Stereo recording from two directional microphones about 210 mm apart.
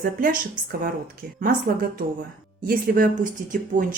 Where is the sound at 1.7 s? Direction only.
45° right (ahead or behind).